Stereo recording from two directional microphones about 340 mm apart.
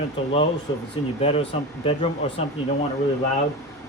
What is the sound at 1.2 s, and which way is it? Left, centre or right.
Speech, centre.